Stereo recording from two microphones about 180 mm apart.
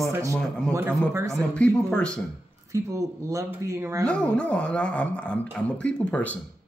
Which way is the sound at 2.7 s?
15° right (ahead or behind).